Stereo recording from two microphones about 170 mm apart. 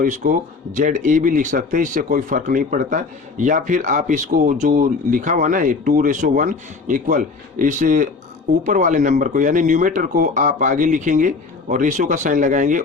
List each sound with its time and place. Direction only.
0.0 s speech: 50° right (ahead or behind)